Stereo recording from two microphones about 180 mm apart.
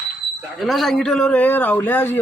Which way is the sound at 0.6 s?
Centre (ahead or behind).